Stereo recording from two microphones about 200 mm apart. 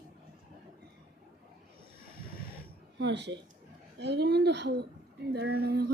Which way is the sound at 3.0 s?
60° right (ahead or behind).